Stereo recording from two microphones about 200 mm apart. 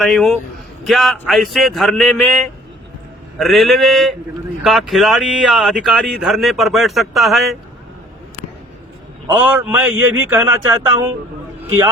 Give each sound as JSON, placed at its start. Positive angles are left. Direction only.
{"t": 0.0, "sound": "speech", "side_deg": 0}
{"t": 9.5, "sound": "speech", "side_deg": -5}